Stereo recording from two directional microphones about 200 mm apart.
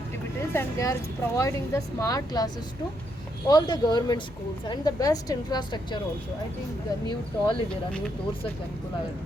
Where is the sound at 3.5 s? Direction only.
20° left (ahead or behind).